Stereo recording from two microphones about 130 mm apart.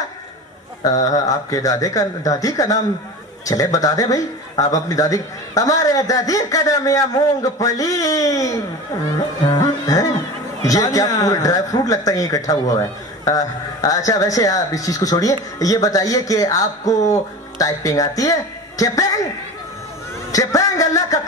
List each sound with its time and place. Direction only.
1.0 s speech: 25° left (ahead or behind)
9.5 s music: 25° left (ahead or behind)
10.6 s speech: 25° left (ahead or behind)
13.7 s speech: 25° left (ahead or behind)
20.2 s speech: 25° left (ahead or behind)